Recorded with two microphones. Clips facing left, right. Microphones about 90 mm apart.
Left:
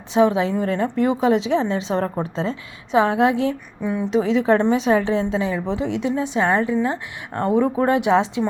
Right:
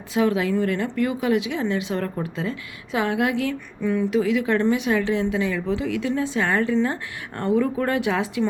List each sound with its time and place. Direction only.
0.1 s a woman's voice: 25° left (ahead or behind)